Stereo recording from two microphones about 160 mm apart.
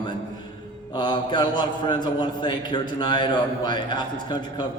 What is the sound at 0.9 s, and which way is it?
A man's voice, 25° left (ahead or behind).